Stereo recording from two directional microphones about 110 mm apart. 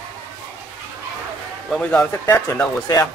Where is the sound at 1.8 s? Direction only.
15° left (ahead or behind).